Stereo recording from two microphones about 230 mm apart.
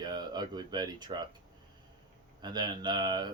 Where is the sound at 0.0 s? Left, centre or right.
Centre.